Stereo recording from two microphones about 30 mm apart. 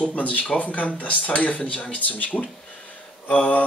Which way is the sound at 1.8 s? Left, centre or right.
Left.